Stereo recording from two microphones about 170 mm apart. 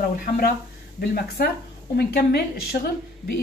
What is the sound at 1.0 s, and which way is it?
A woman's voice, 65° left (ahead or behind).